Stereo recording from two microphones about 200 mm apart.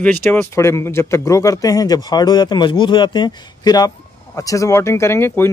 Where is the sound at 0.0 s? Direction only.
10° left (ahead or behind).